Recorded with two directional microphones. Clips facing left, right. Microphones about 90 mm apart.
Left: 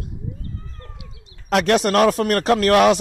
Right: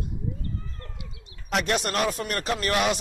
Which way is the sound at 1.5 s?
85° left.